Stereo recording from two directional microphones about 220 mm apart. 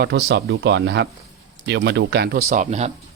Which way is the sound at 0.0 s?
50° right (ahead or behind).